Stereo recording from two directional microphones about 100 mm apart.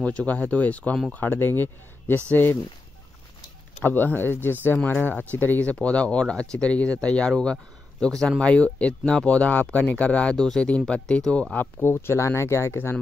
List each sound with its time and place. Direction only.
0.0 s speech: 15° left (ahead or behind)
3.8 s speech: 20° left (ahead or behind)
11.8 s speech: 25° left (ahead or behind)